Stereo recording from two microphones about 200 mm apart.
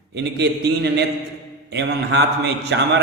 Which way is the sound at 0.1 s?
55° right (ahead or behind).